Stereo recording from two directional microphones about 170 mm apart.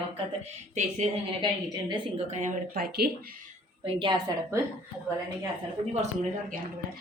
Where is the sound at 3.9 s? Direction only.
30° right (ahead or behind).